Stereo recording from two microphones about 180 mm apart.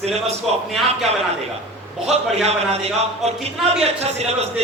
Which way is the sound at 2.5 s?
35° right (ahead or behind).